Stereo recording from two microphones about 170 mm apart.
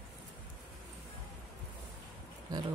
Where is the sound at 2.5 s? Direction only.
25° right (ahead or behind).